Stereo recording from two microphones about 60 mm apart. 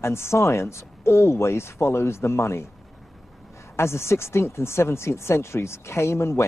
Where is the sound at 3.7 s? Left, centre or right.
Left.